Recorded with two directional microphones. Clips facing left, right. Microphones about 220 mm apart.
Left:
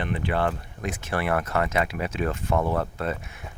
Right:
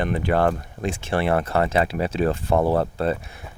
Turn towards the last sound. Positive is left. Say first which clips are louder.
# right 6 dB
turn(degrees=-35)  # may be behind; listen again after turning